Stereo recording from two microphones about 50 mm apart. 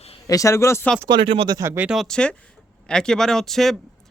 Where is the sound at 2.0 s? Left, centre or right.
Centre.